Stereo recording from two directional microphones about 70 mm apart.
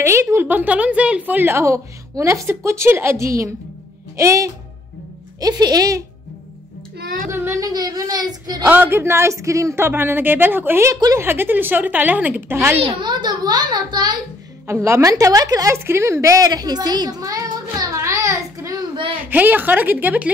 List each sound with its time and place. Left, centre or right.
0.0 s a woman's voice: right
0.5 s a woman's voice: right
1.6 s a woman's voice: right
5.4 s speech: right
7.2 s speech: right
7.6 s speech: right
8.6 s a woman's voice: right
8.9 s a woman's voice: right
13.0 s a child's voice: right
14.7 s a woman's voice: right
15.7 s a sound: right
19.2 s a woman's voice: right